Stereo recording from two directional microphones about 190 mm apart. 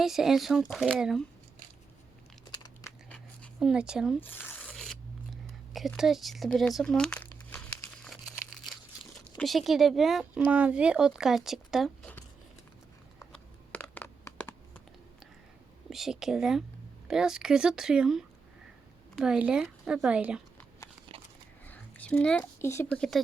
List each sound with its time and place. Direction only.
0.0 s speech: centre (ahead or behind)
2.8 s scissors: 15° left (ahead or behind)
3.6 s speech: 5° right (ahead or behind)
4.2 s a sound: 10° left (ahead or behind)
5.7 s speech: centre (ahead or behind)
6.7 s crumpling: 5° left (ahead or behind)
9.4 s speech: centre (ahead or behind)
13.3 s a sound: 10° left (ahead or behind)
15.9 s speech: centre (ahead or behind)
21.1 s a sound: 30° right (ahead or behind)
21.7 s speech: 5° left (ahead or behind)